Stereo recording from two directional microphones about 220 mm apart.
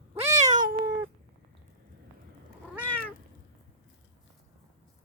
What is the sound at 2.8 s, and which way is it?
Cat, 10° left (ahead or behind).